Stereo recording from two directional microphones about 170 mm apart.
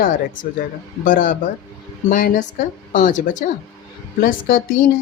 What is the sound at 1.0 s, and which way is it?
Speech, 55° left (ahead or behind).